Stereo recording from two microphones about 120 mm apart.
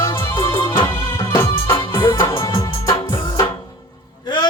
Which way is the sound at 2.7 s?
45° left (ahead or behind).